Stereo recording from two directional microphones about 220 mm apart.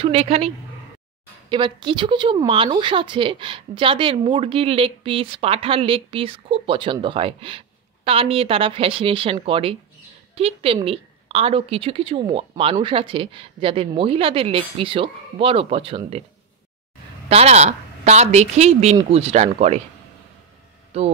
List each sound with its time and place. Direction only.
0.0 s speech: 25° right (ahead or behind)
1.5 s speech: 20° right (ahead or behind)
17.3 s speech: 30° right (ahead or behind)
20.9 s speech: 30° right (ahead or behind)